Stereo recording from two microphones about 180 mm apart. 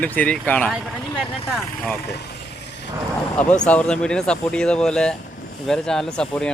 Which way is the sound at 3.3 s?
5° left (ahead or behind).